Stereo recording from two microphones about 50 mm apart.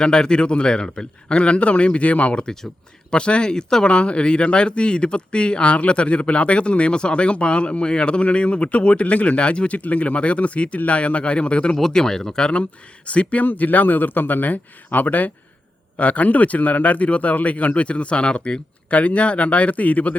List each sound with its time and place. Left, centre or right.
0.0 s speech: centre; by 20.1 s left